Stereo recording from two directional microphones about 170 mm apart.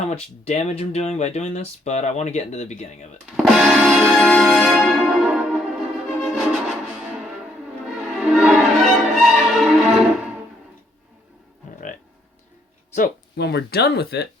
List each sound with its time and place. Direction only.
0.0 s speech: 40° left (ahead or behind)
3.3 s music: centre (ahead or behind)
13.3 s speech: 75° left (ahead or behind)